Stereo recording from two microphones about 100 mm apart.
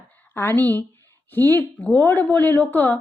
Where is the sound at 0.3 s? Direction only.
20° left (ahead or behind).